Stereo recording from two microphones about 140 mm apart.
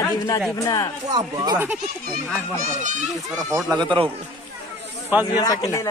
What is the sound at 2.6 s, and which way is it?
Speech, 65° right (ahead or behind).